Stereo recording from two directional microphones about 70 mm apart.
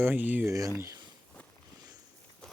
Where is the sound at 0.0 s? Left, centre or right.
Right.